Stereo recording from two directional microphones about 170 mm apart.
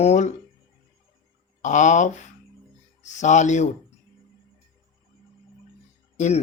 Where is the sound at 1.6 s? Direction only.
45° left (ahead or behind).